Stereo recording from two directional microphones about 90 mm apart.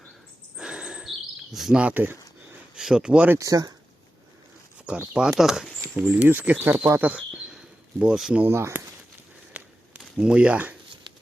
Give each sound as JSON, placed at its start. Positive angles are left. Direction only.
{"t": 0.6, "sound": "chirp", "side_deg": -10}
{"t": 1.5, "sound": "speech", "side_deg": -5}
{"t": 1.8, "sound": "speech", "side_deg": -20}
{"t": 2.7, "sound": "speech", "side_deg": -5}
{"t": 3.3, "sound": "speech", "side_deg": -40}
{"t": 5.4, "sound": "speech", "side_deg": -5}
{"t": 6.0, "sound": "speech", "side_deg": -20}
{"t": 7.1, "sound": "a sound", "side_deg": -10}
{"t": 8.4, "sound": "speech", "side_deg": -25}
{"t": 10.2, "sound": "speech", "side_deg": -10}